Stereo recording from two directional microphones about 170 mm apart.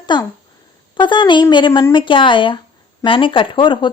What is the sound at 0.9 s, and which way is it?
A woman's voice, 30° left (ahead or behind).